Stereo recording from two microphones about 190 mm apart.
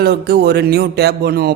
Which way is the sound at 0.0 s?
60° right (ahead or behind).